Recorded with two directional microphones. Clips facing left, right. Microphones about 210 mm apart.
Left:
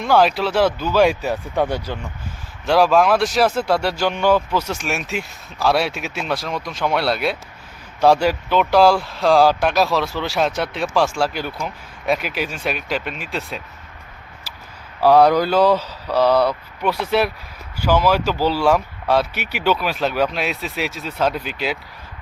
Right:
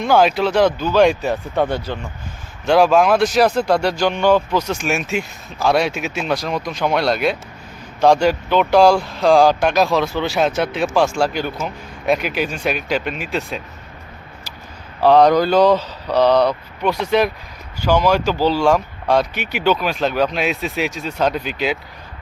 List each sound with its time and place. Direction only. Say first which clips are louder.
0.0 s speech: right 2 dB; centre (ahead or behind)
2.6 s speech: right 2 dB; centre (ahead or behind)
15.0 s speech: right 1 dB; 5° left (ahead or behind)